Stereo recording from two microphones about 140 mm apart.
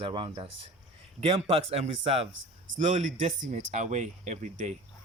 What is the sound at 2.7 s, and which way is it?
Speech, 60° right (ahead or behind).